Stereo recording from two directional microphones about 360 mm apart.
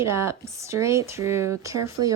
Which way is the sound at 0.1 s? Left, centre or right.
Centre.